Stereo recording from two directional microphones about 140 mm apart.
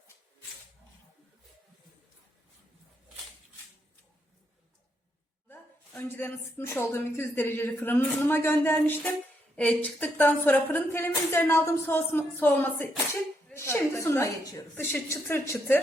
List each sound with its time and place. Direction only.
5.5 s a woman's voice: 10° left (ahead or behind)